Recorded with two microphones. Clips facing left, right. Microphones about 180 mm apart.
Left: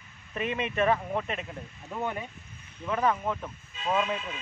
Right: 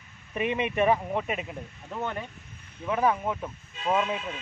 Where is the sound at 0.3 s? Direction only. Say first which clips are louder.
Right 3 dB; 15° right (ahead or behind).